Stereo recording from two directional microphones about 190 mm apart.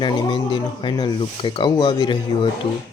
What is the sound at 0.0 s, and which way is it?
Speech, 25° left (ahead or behind).